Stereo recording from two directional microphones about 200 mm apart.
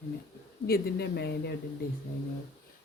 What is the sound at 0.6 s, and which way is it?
Speech, 50° left (ahead or behind).